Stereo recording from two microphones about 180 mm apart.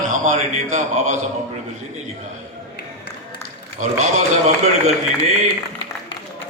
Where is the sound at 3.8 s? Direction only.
45° right (ahead or behind).